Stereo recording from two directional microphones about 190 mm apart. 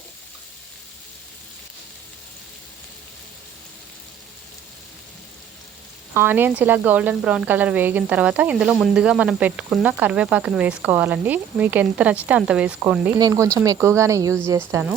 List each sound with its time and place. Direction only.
6.1 s speech: 10° right (ahead or behind)
13.1 s speech: 20° right (ahead or behind)